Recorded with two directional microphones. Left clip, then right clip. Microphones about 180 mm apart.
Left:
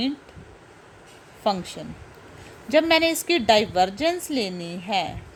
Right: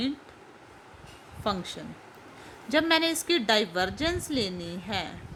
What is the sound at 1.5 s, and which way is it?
A woman's voice, 5° left (ahead or behind).